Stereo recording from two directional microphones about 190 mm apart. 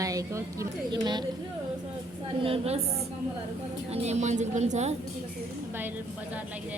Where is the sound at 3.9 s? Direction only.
35° right (ahead or behind).